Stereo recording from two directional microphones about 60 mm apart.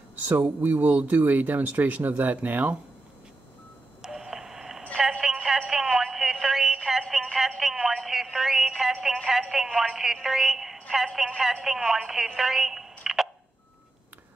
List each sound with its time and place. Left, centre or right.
0.4 s speech: right
4.0 s radio: centre
5.2 s a sound: centre
7.3 s music: centre
9.0 s telephone: centre
11.3 s a sound: centre
12.4 s telephone: centre
13.0 s tick: centre